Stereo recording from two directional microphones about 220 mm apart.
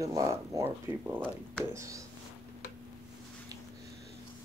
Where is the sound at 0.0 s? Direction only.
15° right (ahead or behind).